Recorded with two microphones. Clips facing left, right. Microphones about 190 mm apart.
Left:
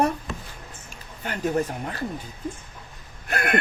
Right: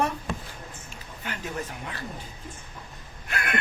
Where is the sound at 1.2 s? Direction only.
45° left (ahead or behind).